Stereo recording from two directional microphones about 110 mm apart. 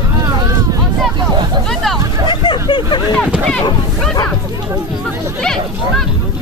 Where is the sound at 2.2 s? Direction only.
40° left (ahead or behind).